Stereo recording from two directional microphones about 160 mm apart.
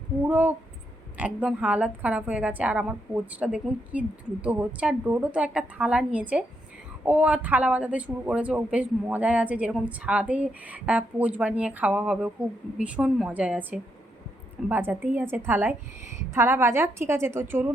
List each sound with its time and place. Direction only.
0.3 s speech: 10° right (ahead or behind)